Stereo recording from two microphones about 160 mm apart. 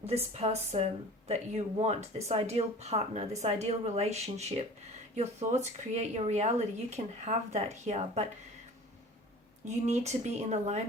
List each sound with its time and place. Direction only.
0.0 s a woman's voice: 40° right (ahead or behind)
9.6 s speech: 45° right (ahead or behind)